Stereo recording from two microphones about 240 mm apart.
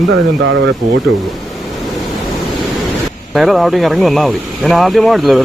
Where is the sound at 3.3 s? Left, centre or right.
Centre.